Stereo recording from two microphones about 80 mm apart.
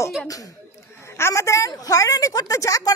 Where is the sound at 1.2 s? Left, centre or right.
Left.